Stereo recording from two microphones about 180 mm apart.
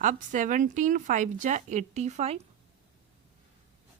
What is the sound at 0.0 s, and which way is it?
Speech, 45° right (ahead or behind).